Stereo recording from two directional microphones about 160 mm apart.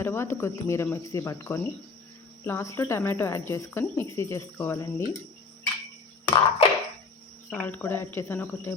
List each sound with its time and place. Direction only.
0.0 s speech: 15° left (ahead or behind)
6.2 s a sound: 30° left (ahead or behind)
7.5 s speech: 10° left (ahead or behind)